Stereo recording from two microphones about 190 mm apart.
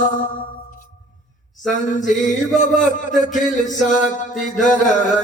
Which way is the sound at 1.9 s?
40° left (ahead or behind).